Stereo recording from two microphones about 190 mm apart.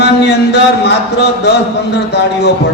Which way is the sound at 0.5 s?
60° left (ahead or behind).